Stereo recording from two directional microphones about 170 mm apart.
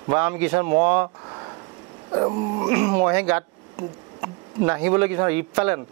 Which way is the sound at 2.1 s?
25° right (ahead or behind).